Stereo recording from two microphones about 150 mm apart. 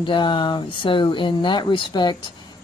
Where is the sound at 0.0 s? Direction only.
35° left (ahead or behind).